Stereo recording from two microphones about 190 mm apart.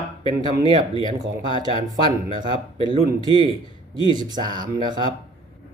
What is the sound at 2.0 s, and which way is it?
Speech, 20° right (ahead or behind).